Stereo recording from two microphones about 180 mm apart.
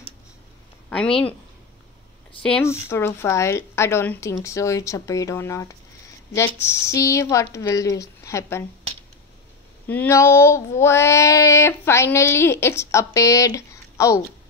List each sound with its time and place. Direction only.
0.8 s speech: 5° left (ahead or behind)
2.6 s speech: 15° left (ahead or behind)
9.8 s speech: 10° left (ahead or behind)